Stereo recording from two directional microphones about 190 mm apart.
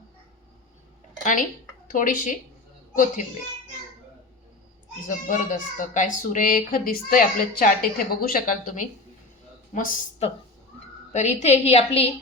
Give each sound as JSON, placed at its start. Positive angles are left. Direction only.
{"t": 1.2, "sound": "speech", "side_deg": 40}
{"t": 5.0, "sound": "a woman's voice", "side_deg": 45}
{"t": 11.1, "sound": "a woman's voice", "side_deg": 35}